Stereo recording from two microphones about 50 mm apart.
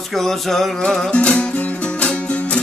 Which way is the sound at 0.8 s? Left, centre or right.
Centre.